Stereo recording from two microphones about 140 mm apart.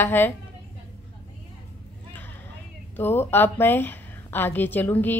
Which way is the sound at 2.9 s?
15° left (ahead or behind).